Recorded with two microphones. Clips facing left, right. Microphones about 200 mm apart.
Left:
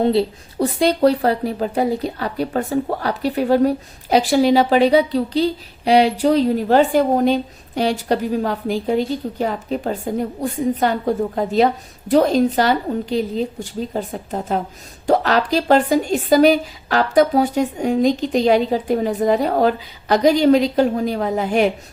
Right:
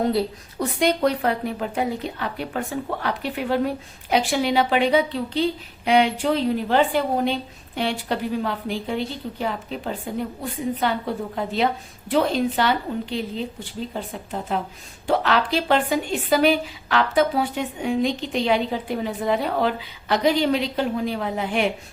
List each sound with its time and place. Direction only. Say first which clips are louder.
0.0 s a woman's voice: left 5 dB; 25° left (ahead or behind)